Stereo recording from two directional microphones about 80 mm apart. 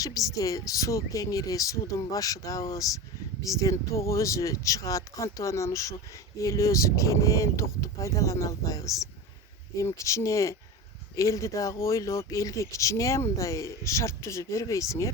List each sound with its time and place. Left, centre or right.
0.0 s speech: left